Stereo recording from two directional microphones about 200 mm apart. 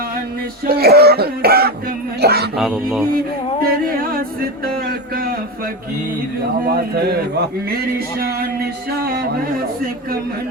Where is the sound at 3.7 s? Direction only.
45° right (ahead or behind).